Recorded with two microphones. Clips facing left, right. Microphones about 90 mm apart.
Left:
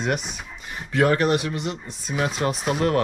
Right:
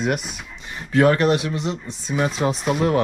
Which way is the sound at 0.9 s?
55° right (ahead or behind).